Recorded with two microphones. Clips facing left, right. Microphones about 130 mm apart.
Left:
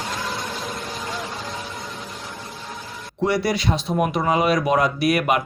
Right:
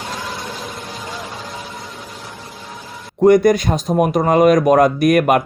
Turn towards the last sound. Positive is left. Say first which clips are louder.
# right 6 dB
turn(degrees=-50)  # may be behind; listen again after turning